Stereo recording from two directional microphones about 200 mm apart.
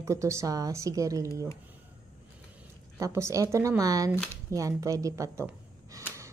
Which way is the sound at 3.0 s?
15° right (ahead or behind).